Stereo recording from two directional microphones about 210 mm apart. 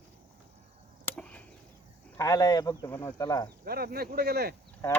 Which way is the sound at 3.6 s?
45° right (ahead or behind).